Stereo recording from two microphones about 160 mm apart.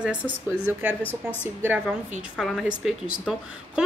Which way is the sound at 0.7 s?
10° right (ahead or behind).